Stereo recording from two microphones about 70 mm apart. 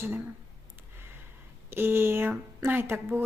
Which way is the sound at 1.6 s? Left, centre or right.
Right.